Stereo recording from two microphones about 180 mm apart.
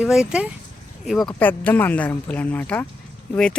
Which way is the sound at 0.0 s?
5° right (ahead or behind).